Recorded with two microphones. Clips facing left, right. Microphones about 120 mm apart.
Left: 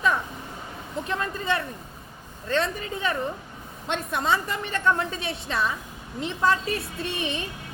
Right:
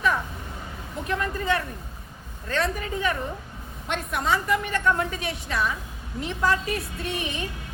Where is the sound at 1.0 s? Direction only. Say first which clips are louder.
Right 3 dB; 25° left (ahead or behind).